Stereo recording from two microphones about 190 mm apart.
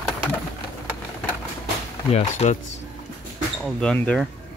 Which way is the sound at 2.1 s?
35° left (ahead or behind).